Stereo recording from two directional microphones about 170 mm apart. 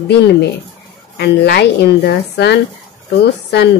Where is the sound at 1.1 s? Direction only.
75° left (ahead or behind).